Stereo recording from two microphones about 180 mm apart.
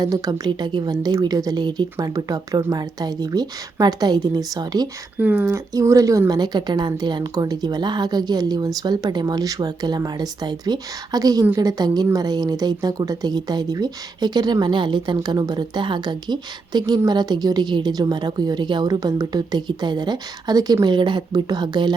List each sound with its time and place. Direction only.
0.0 s a woman's voice: 20° right (ahead or behind)
5.1 s a woman's voice: 10° right (ahead or behind)